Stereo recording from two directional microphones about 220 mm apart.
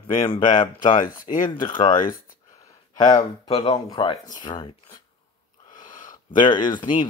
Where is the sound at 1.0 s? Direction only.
35° left (ahead or behind).